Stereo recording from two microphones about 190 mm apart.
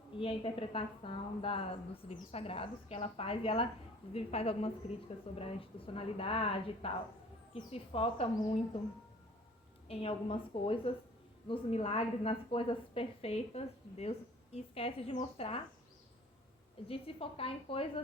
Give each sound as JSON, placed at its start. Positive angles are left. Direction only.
{"t": 0.2, "sound": "a woman's voice", "side_deg": 30}
{"t": 9.9, "sound": "a woman's voice", "side_deg": 30}
{"t": 16.9, "sound": "a woman's voice", "side_deg": 30}